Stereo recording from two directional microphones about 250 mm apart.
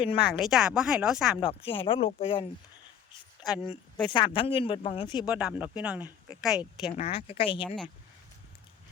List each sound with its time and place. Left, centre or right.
0.0 s speech: left
0.3 s speech: centre
1.4 s speech: left
3.4 s speech: centre
4.0 s speech: centre
5.2 s speech: centre
6.9 s speech: left